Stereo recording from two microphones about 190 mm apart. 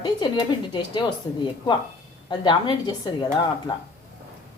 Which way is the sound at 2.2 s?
25° left (ahead or behind).